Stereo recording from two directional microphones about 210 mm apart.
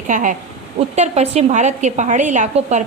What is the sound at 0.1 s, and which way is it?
A woman's voice, 35° right (ahead or behind).